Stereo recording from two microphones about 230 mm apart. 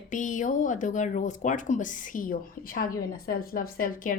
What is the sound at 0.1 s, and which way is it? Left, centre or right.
Speech, left.